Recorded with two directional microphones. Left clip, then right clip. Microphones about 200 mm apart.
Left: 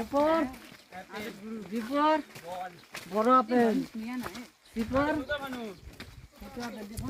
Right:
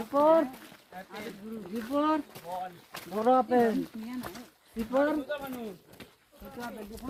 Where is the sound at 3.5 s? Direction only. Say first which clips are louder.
Right 1 dB; 45° left (ahead or behind).